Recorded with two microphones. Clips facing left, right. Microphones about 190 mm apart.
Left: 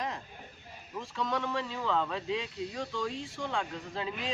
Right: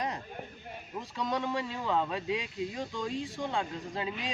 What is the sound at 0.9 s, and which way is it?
Speech, 15° right (ahead or behind).